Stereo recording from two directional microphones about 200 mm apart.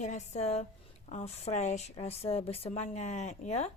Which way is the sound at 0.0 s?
35° left (ahead or behind).